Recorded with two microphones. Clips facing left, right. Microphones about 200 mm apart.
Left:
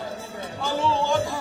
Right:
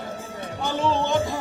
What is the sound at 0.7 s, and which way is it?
Music, 20° right (ahead or behind).